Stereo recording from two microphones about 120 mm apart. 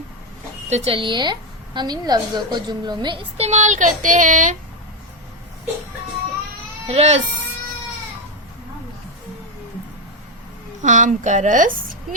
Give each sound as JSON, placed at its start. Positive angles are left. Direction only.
{"t": 0.7, "sound": "a woman's voice", "side_deg": -50}
{"t": 6.8, "sound": "speech", "side_deg": -60}
{"t": 10.8, "sound": "speech", "side_deg": -90}